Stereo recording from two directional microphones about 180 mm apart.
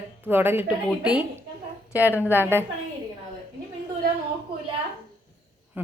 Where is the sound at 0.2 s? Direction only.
10° right (ahead or behind).